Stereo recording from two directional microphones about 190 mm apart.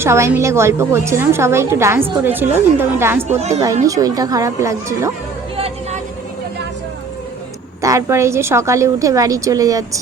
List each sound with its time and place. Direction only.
0.0 s a woman's voice: 15° right (ahead or behind)
3.2 s speech: 35° right (ahead or behind)
3.6 s a woman's voice: 15° right (ahead or behind)
5.5 s a sound: 30° right (ahead or behind)
7.8 s a woman's voice: 15° right (ahead or behind)